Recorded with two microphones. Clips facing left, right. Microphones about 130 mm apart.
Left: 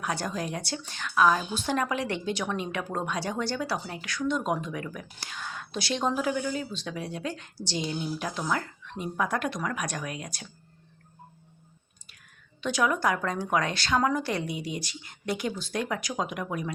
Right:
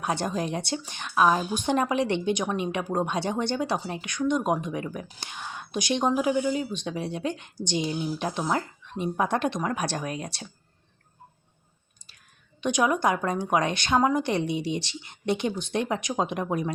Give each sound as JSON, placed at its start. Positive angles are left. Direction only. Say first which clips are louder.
{"t": 0.0, "sound": "a woman's voice", "louder": "right 3 dB", "side_deg": -25}
{"t": 12.6, "sound": "a woman's voice", "louder": "right 3 dB", "side_deg": -20}